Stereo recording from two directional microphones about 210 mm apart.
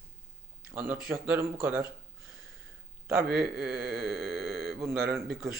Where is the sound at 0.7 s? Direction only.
10° right (ahead or behind).